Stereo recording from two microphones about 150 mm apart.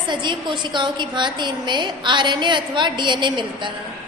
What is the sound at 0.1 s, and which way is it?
A woman's voice, 30° right (ahead or behind).